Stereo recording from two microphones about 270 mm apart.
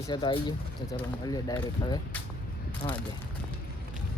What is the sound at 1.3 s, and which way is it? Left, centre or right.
Speech, centre.